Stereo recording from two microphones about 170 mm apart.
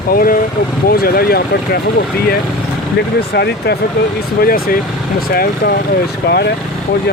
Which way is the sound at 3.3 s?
75° left (ahead or behind).